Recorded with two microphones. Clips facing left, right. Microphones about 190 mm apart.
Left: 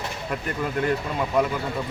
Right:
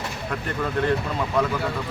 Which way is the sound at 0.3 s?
10° left (ahead or behind).